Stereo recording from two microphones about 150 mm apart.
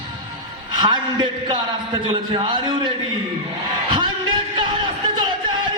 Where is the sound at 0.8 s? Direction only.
35° right (ahead or behind).